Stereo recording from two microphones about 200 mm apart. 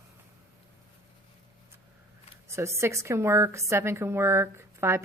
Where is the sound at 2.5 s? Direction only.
15° right (ahead or behind).